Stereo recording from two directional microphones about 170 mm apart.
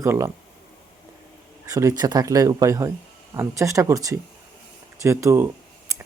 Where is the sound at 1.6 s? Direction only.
20° right (ahead or behind).